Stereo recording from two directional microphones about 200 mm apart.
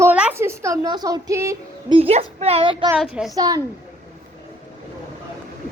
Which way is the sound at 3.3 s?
20° right (ahead or behind).